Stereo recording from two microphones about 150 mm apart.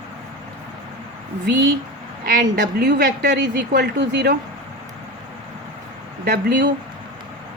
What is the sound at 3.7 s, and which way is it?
Speech, 90° right.